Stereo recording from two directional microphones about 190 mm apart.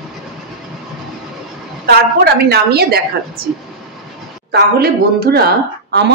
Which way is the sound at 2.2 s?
55° right (ahead or behind).